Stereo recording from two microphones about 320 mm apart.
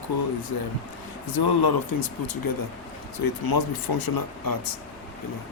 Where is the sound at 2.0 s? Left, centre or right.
Left.